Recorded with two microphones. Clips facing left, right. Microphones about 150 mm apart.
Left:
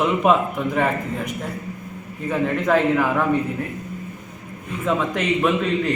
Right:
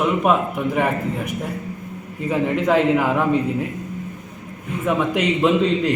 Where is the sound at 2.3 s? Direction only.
15° right (ahead or behind).